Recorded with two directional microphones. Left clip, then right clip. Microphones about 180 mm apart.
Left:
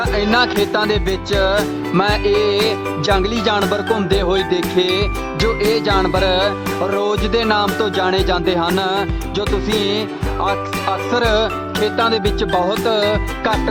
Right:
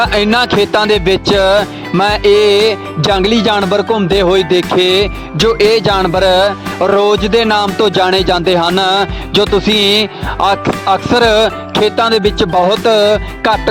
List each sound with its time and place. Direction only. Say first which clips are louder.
0.0 s music: right 5 dB; 50° right (ahead or behind)